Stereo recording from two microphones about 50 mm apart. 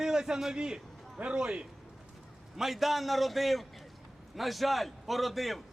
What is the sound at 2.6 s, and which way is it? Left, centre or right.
A man's voice, centre.